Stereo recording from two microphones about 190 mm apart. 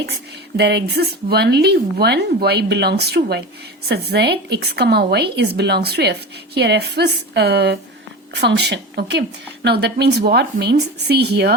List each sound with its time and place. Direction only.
0.5 s a woman's voice: 60° right (ahead or behind)